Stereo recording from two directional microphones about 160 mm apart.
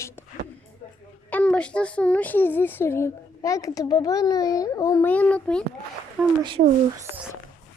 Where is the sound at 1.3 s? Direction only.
10° left (ahead or behind).